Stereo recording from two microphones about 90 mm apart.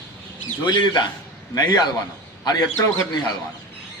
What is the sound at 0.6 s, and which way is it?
Speech, 60° left (ahead or behind).